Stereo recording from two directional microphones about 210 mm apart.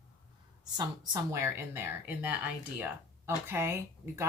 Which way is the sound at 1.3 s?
10° right (ahead or behind).